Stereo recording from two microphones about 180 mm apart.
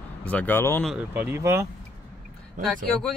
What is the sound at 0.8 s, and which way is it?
Speech, 10° right (ahead or behind).